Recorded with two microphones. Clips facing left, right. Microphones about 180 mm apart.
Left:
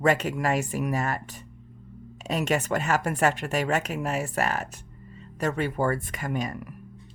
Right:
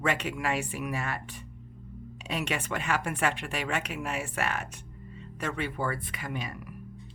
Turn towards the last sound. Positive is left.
turn(degrees=45)  # may be behind; listen again after turning